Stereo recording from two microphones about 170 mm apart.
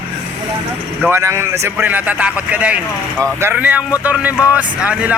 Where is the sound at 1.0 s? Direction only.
15° right (ahead or behind).